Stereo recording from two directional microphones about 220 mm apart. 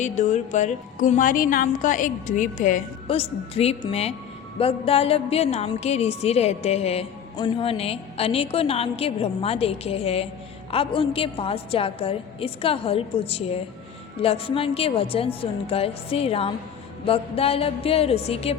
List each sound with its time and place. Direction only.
0.0 s a woman's voice: 35° left (ahead or behind)